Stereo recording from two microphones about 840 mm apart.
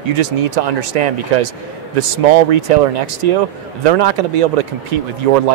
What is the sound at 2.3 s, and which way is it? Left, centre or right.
Speech, right.